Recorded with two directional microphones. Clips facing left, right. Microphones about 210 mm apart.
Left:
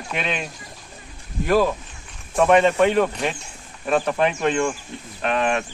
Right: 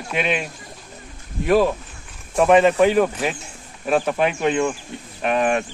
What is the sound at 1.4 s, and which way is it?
A man's voice, centre (ahead or behind).